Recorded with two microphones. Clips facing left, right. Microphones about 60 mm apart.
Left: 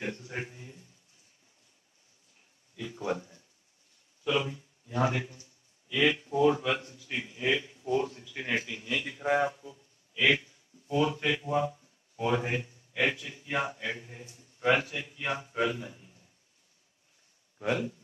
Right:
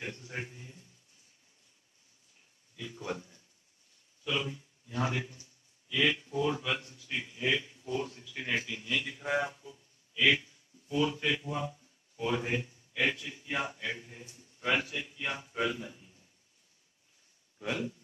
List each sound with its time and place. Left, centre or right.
0.0 s a man's voice: centre
2.7 s a sound: centre
5.9 s a man's voice: centre
10.4 s a sound: centre
11.0 s speech: centre
17.6 s speech: left